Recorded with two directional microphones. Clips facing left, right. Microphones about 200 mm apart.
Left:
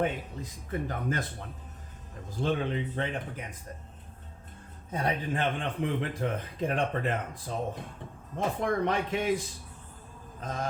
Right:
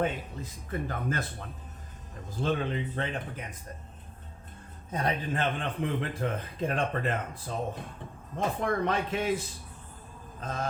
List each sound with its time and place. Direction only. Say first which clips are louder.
0.7 s speech: left 1 dB; 20° left (ahead or behind)
4.9 s speech: even; 10° left (ahead or behind)
10.4 s speech: even; 15° left (ahead or behind)